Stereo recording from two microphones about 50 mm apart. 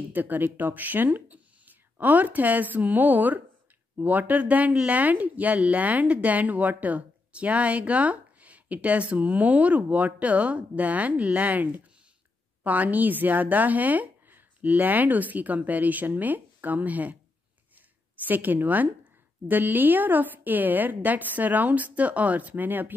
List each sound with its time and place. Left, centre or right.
0.1 s speech: right
18.2 s speech: right